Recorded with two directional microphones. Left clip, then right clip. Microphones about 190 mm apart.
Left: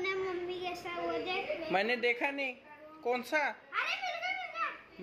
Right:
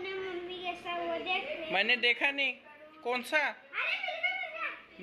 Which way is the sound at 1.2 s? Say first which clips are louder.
Right 2 dB; 20° left (ahead or behind).